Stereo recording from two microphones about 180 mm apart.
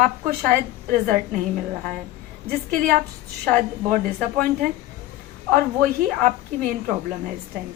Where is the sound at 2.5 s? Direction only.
50° right (ahead or behind).